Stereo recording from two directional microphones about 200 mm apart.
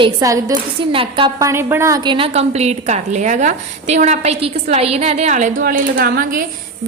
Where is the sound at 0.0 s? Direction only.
15° right (ahead or behind).